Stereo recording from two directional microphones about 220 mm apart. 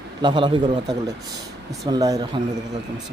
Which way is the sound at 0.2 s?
20° right (ahead or behind).